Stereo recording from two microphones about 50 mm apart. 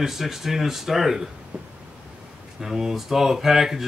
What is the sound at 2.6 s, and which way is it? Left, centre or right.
Speech, centre.